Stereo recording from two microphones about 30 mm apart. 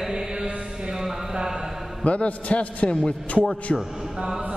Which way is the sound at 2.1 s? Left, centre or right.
Left.